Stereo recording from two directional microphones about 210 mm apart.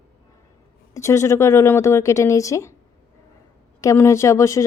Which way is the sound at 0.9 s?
15° left (ahead or behind).